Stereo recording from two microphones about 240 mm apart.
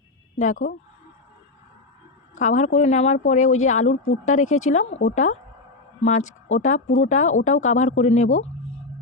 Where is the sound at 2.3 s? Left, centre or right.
Left.